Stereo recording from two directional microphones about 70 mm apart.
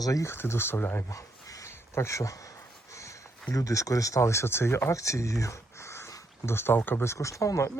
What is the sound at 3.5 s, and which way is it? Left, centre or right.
Speech, left.